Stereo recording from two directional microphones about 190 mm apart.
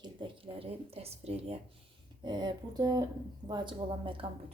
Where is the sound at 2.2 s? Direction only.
20° right (ahead or behind).